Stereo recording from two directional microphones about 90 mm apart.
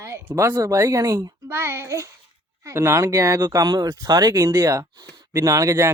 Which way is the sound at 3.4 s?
45° right (ahead or behind).